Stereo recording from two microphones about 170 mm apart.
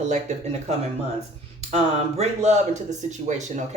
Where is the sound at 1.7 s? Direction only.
40° right (ahead or behind).